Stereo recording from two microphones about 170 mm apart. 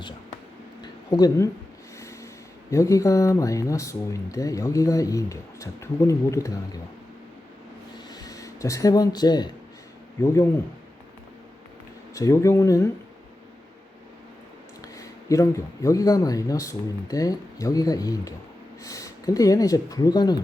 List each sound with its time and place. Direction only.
0.8 s a sound: 25° left (ahead or behind)
2.0 s speech: 20° left (ahead or behind)
7.9 s a sound: 20° left (ahead or behind)
10.2 s speech: 15° left (ahead or behind)
12.1 s speech: 20° left (ahead or behind)
14.9 s speech: 20° left (ahead or behind)